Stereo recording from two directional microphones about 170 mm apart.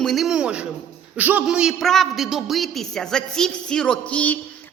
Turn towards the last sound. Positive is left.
turn(degrees=10)  # may be behind; listen again after turning